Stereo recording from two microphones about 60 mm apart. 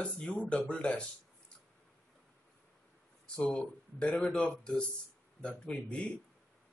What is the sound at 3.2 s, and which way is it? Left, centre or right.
Speech, centre.